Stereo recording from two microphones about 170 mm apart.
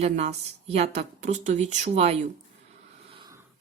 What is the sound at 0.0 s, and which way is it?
Speech, 40° right (ahead or behind).